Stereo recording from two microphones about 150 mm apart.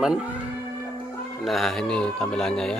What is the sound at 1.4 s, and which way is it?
Speech, centre (ahead or behind).